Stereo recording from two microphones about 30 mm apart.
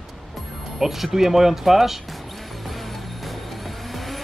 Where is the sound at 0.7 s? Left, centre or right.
Centre.